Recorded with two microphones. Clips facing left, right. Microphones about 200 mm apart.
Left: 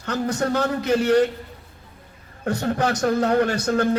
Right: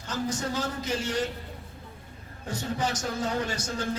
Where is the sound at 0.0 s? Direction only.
65° left (ahead or behind).